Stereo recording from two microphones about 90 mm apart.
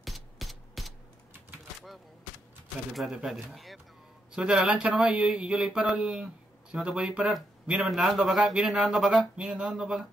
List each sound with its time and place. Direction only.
0.0 s music: centre (ahead or behind)
2.9 s speech: centre (ahead or behind)
4.4 s speech: 15° right (ahead or behind)